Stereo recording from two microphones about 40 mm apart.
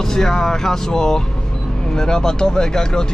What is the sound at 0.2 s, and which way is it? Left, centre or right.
Speech, centre.